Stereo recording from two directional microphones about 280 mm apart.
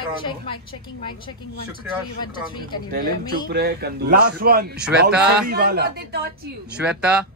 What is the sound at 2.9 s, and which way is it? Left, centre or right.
A man's voice, right.